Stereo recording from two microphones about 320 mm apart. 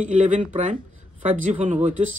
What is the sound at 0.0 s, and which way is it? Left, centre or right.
Speech, right.